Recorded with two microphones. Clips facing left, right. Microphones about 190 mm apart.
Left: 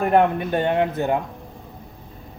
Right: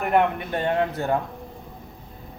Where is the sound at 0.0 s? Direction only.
30° left (ahead or behind).